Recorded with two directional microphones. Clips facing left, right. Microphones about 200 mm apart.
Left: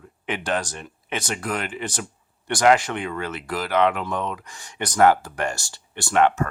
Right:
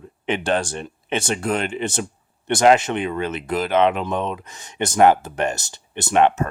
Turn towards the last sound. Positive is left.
turn(degrees=-20)  # may be behind; listen again after turning